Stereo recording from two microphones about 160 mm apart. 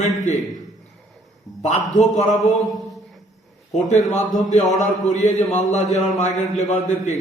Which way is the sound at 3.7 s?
45° left (ahead or behind).